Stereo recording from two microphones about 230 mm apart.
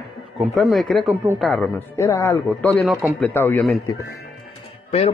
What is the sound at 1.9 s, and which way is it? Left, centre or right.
Speech, centre.